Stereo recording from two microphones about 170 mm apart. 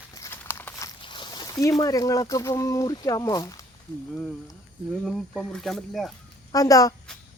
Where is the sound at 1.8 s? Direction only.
20° left (ahead or behind).